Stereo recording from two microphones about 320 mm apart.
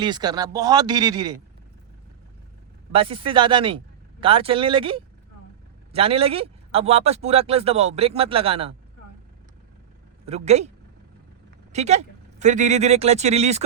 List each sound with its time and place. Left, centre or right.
0.0 s speech: centre
2.9 s speech: centre
10.2 s speech: centre
11.7 s speech: right